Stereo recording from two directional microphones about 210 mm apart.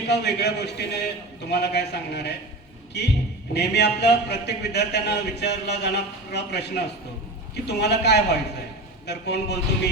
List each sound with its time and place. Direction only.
0.1 s a man's voice: 55° left (ahead or behind)